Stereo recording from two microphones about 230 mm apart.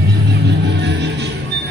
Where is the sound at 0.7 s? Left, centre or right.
Right.